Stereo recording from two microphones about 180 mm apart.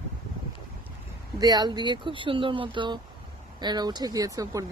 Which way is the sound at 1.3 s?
20° right (ahead or behind).